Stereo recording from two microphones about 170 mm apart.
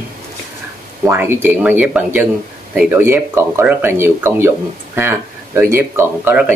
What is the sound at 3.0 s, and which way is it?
Speech, 15° right (ahead or behind).